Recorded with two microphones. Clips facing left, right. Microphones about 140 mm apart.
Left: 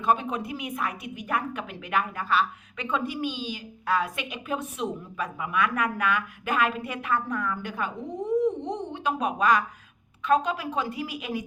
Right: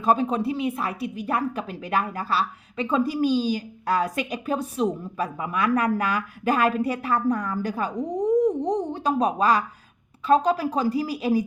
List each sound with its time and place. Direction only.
0.0 s a woman's voice: 35° right (ahead or behind)